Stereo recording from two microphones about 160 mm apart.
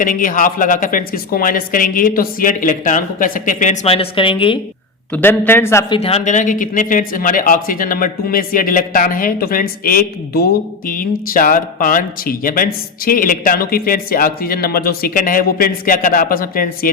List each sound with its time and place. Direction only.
0.0 s speech: 55° left (ahead or behind)
3.8 s a woman's voice: 35° left (ahead or behind)
5.1 s speech: 10° left (ahead or behind)
5.9 s speech: 40° left (ahead or behind); by 16.9 s 60° left (ahead or behind)